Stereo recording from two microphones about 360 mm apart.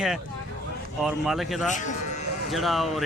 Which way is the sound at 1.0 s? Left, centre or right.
Centre.